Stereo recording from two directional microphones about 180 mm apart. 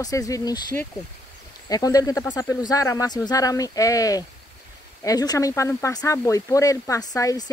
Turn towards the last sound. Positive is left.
turn(degrees=20)  # may be behind; listen again after turning